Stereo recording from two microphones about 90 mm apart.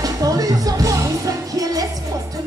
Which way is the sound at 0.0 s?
40° right (ahead or behind).